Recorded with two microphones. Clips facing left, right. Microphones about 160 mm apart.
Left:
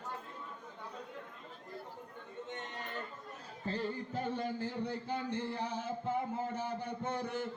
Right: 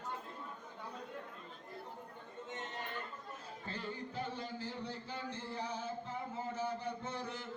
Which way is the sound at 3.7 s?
50° left (ahead or behind).